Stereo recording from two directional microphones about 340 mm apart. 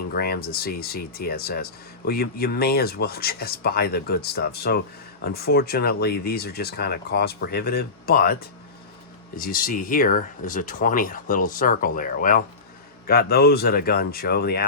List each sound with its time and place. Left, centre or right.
0.1 s speech: left